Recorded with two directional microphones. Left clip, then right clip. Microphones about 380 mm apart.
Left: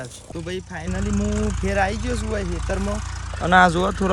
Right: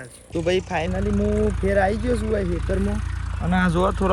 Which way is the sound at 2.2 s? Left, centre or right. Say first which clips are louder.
Right 2 dB; right.